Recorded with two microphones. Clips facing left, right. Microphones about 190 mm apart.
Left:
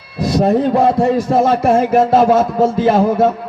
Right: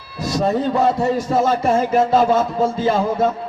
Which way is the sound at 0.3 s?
60° left (ahead or behind).